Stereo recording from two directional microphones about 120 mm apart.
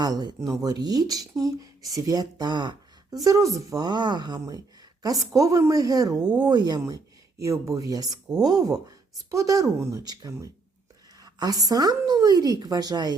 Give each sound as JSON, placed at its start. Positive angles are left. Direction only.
{"t": 0.0, "sound": "a woman's voice", "side_deg": -35}